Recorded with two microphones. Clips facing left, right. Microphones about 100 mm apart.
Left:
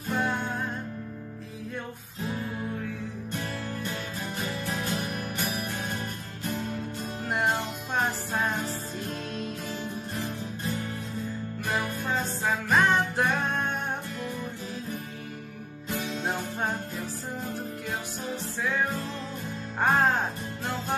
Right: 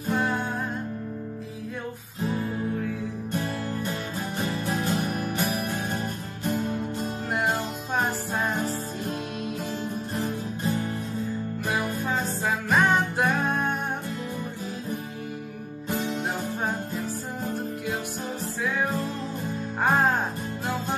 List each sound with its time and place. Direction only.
0.1 s music: centre (ahead or behind)
4.7 s music: 40° right (ahead or behind)
11.6 s music: centre (ahead or behind)
16.2 s music: centre (ahead or behind)
19.8 s music: centre (ahead or behind)